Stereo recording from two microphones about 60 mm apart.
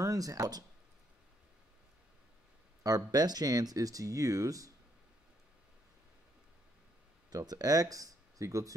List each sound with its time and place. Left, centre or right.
0.0 s speech: right
2.8 s speech: right
7.2 s speech: right